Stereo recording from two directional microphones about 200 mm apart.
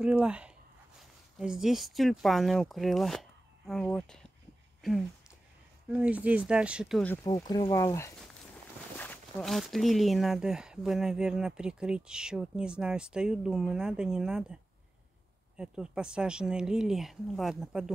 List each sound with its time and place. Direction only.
0.0 s speech: 5° right (ahead or behind)
5.9 s speech: 5° right (ahead or behind)
7.2 s speech: 20° left (ahead or behind); by 17.9 s centre (ahead or behind)